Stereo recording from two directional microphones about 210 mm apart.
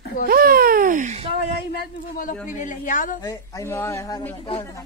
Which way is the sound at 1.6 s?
50° left (ahead or behind).